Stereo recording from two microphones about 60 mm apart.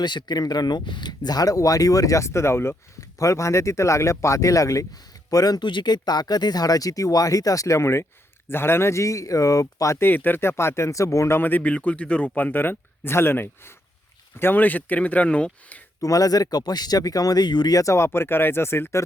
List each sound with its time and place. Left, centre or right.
1.3 s speech: left
3.2 s speech: left
5.3 s speech: left
7.8 s speech: left
10.0 s speech: left
11.3 s a man's voice: left
16.0 s speech: left
17.9 s speech: left